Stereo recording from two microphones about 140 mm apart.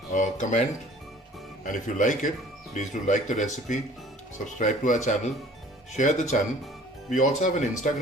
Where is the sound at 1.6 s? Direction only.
70° left (ahead or behind).